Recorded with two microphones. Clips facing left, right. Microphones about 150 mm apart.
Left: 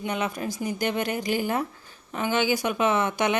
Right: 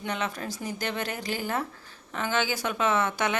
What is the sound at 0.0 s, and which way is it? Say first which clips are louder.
Speech: left 3 dB; 10° left (ahead or behind).